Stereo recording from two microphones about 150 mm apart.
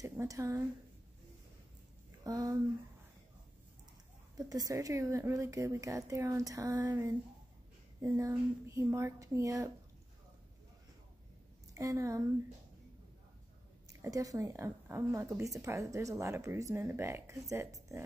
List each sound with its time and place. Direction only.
0.0 s a woman's voice: 20° right (ahead or behind)
2.2 s a woman's voice: 25° right (ahead or behind)
4.4 s a woman's voice: 25° right (ahead or behind)
8.3 s a woman's voice: 15° right (ahead or behind)
11.7 s a woman's voice: 20° right (ahead or behind)
14.0 s a woman's voice: 25° right (ahead or behind)